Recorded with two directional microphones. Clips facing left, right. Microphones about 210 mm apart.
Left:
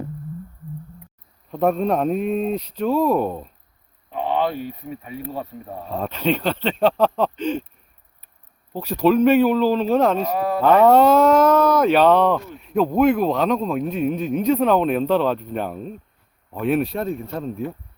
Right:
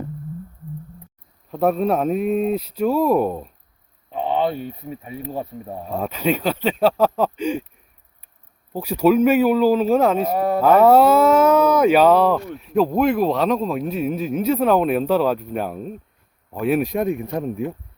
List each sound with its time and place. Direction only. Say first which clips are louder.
1.5 s speech: right 1 dB; 5° right (ahead or behind)
4.1 s a sound: right 1 dB; 30° right (ahead or behind)
5.2 s speech: right 4 dB; 20° right (ahead or behind)
5.9 s speech: right 1 dB; 10° right (ahead or behind)
8.7 s speech: right 1 dB; 10° right (ahead or behind)